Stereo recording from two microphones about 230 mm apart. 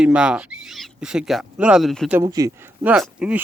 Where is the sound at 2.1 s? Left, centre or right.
Centre.